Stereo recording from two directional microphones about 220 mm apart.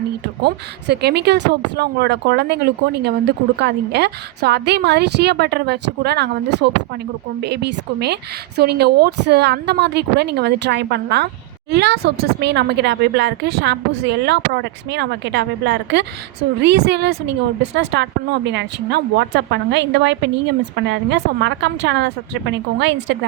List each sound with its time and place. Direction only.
0.9 s speech: 50° right (ahead or behind)
3.6 s speech: 50° right (ahead or behind)